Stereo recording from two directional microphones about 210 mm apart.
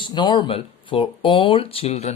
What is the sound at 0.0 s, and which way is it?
Speech, 20° left (ahead or behind).